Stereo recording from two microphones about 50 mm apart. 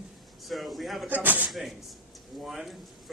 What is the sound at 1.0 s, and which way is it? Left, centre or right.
Speech, right.